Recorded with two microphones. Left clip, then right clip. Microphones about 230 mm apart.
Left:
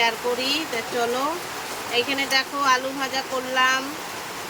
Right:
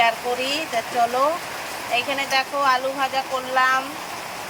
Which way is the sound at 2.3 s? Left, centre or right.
Centre.